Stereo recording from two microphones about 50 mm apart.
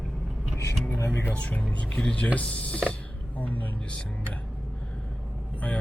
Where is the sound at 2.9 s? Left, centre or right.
Left.